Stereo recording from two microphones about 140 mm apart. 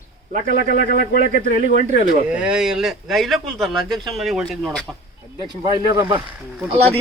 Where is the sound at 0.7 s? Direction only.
80° left.